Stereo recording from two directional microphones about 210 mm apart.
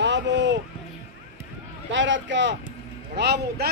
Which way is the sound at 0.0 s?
60° right (ahead or behind).